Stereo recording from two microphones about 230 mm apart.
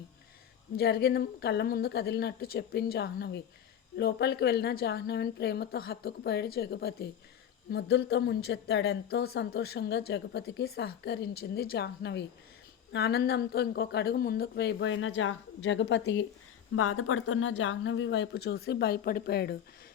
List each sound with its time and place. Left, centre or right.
0.8 s a woman's voice: left
16.7 s a woman's voice: left